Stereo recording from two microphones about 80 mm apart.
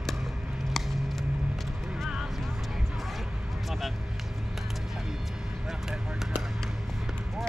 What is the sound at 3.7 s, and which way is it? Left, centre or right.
Vehicle, centre.